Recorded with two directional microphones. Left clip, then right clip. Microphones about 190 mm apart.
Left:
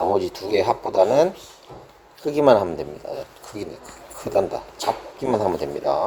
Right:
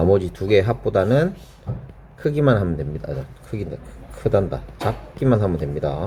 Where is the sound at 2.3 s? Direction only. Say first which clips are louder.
Left 5 dB; 20° left (ahead or behind).